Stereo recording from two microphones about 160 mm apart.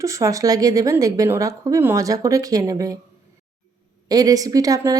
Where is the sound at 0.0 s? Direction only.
20° right (ahead or behind).